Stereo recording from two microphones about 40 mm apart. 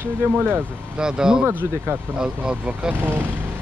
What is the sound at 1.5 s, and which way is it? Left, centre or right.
Speech, right.